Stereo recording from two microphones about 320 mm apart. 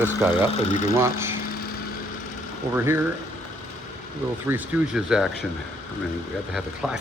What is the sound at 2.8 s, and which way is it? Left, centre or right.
Speech, centre.